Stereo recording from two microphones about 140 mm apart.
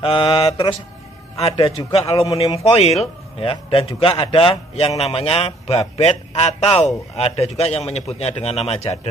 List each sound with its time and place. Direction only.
0.0 s mantra: 35° left (ahead or behind)
1.8 s mantra: 40° left (ahead or behind)
2.5 s a man's voice: 50° left (ahead or behind)